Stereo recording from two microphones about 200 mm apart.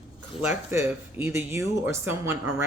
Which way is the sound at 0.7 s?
15° right (ahead or behind).